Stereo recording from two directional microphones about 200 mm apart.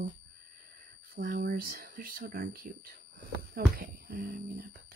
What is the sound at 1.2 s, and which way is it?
Speech, 45° right (ahead or behind).